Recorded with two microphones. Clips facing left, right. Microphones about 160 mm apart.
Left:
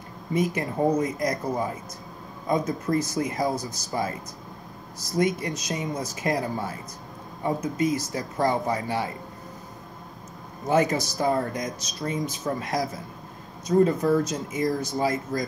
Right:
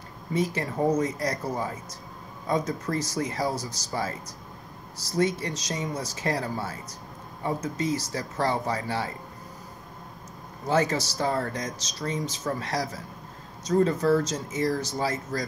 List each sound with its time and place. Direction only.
0.3 s speech: 15° left (ahead or behind)
10.7 s speech: 15° left (ahead or behind)